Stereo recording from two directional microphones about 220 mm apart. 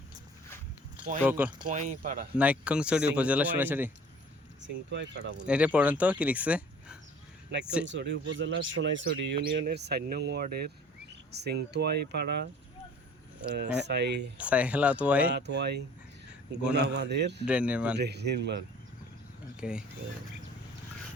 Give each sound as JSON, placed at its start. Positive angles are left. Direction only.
{"t": 1.2, "sound": "speech", "side_deg": -10}
{"t": 2.0, "sound": "speech", "side_deg": -40}
{"t": 2.4, "sound": "speech", "side_deg": -5}
{"t": 4.6, "sound": "speech", "side_deg": -55}
{"t": 5.5, "sound": "speech", "side_deg": -5}
{"t": 7.9, "sound": "speech", "side_deg": -55}
{"t": 13.5, "sound": "speech", "side_deg": -50}
{"t": 14.3, "sound": "speech", "side_deg": -5}
{"t": 15.4, "sound": "speech", "side_deg": -50}
{"t": 17.4, "sound": "speech", "side_deg": -5}
{"t": 17.9, "sound": "speech", "side_deg": -50}
{"t": 19.5, "sound": "speech", "side_deg": -5}